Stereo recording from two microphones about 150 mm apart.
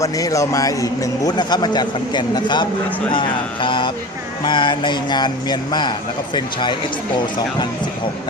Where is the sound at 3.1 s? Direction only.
35° left (ahead or behind).